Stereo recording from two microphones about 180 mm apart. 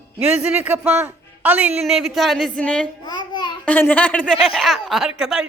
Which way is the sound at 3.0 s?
25° left (ahead or behind).